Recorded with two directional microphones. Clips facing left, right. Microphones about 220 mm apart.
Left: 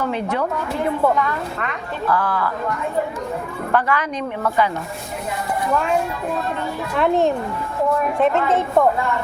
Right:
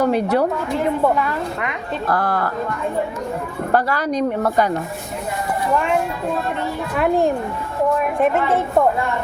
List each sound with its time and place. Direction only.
0.0 s a woman's voice: 40° right (ahead or behind)
1.0 s speech: 15° right (ahead or behind)
2.0 s speech: 40° right (ahead or behind)
3.7 s a woman's voice: 40° right (ahead or behind)
6.9 s speech: 10° right (ahead or behind)